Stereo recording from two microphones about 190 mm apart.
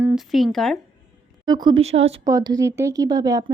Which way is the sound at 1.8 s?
35° right (ahead or behind).